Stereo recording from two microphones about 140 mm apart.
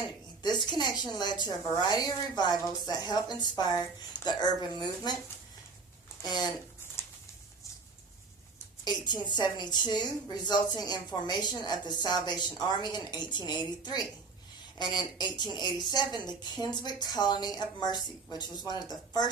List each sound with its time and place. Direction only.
0.4 s a woman's voice: 30° left (ahead or behind)
6.2 s a woman's voice: 30° left (ahead or behind)
8.8 s a woman's voice: 30° left (ahead or behind)